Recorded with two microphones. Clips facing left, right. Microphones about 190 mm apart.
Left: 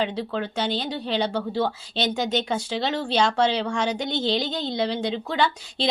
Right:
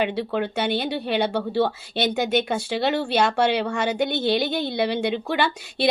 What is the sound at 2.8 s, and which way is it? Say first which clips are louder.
Speech: right 3 dB; 60° right (ahead or behind).